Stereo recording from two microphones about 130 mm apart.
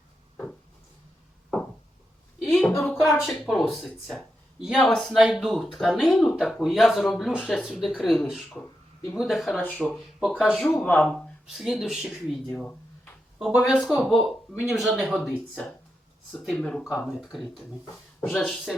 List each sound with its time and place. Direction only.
2.5 s a sound: 5° left (ahead or behind)
3.0 s speech: 5° right (ahead or behind)
10.6 s speech: 10° left (ahead or behind)
11.4 s speech: centre (ahead or behind)
12.5 s a sound: 10° left (ahead or behind)
13.5 s speech: 5° right (ahead or behind)
16.8 s speech: 20° left (ahead or behind)
18.2 s speech: 10° left (ahead or behind)